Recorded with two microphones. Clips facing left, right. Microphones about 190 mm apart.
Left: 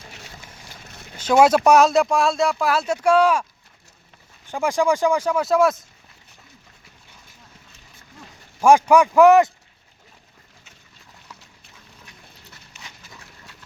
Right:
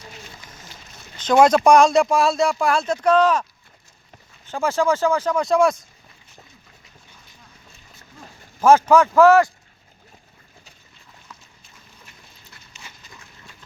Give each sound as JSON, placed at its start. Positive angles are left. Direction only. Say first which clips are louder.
{"t": 1.1, "sound": "speech", "louder": "even", "side_deg": 10}
{"t": 4.4, "sound": "speech", "louder": "even", "side_deg": 15}
{"t": 8.6, "sound": "speech", "louder": "even", "side_deg": 15}
{"t": 12.7, "sound": "horse", "louder": "even", "side_deg": 60}